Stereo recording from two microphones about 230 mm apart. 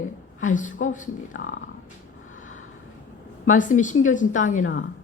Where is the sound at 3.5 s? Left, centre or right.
Left.